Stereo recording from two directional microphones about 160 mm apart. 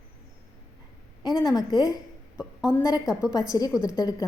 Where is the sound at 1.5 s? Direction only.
25° left (ahead or behind).